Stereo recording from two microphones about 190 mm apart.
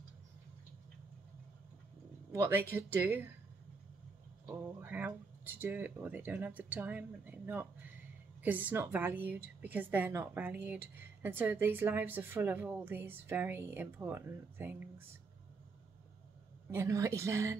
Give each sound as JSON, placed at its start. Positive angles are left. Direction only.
{"t": 2.3, "sound": "a woman's voice", "side_deg": -10}
{"t": 4.5, "sound": "a woman's voice", "side_deg": -10}
{"t": 16.7, "sound": "a woman's voice", "side_deg": -15}